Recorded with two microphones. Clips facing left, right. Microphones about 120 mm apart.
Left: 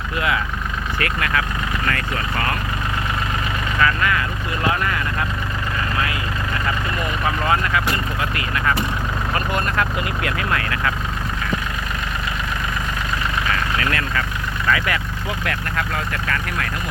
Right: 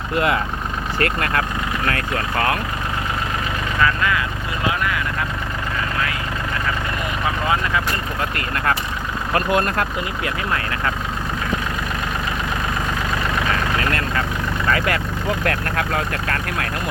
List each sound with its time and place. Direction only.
0.9 s speech: 40° right (ahead or behind)
2.0 s speech: 50° right (ahead or behind)
10.2 s speech: 25° right (ahead or behind)
14.7 s speech: 45° right (ahead or behind)